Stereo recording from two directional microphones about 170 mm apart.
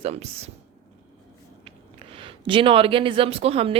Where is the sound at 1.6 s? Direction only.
35° right (ahead or behind).